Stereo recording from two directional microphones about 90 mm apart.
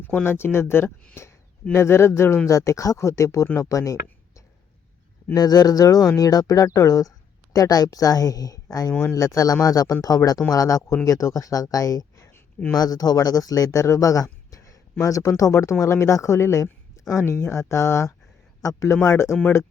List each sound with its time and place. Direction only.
0.0 s speech: 20° left (ahead or behind)
1.1 s a sound: 30° left (ahead or behind)
1.7 s speech: 30° left (ahead or behind)
5.3 s speech: 45° left (ahead or behind)
14.5 s a sound: 40° left (ahead or behind)
15.0 s speech: 40° left (ahead or behind)